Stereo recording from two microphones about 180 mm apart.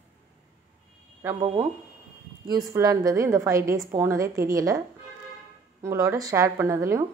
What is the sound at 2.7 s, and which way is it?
A woman's voice, 20° right (ahead or behind).